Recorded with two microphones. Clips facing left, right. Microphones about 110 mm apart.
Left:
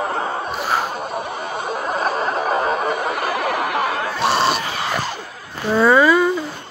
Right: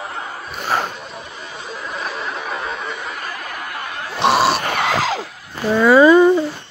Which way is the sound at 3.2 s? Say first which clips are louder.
Left 9 dB; 85° left.